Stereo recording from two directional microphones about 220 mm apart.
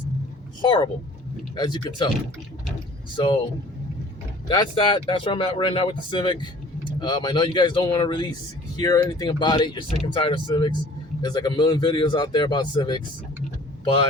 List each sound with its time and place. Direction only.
0.6 s speech: 20° left (ahead or behind)
3.2 s speech: 20° left (ahead or behind)
4.4 s speech: 20° left (ahead or behind)